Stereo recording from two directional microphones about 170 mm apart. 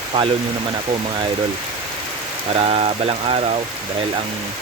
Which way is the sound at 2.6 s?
35° right (ahead or behind).